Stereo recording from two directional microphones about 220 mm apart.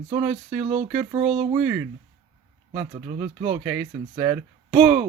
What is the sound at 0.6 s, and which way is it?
Speech, 25° right (ahead or behind).